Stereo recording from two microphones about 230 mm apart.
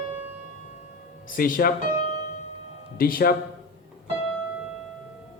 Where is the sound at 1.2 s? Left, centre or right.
Left.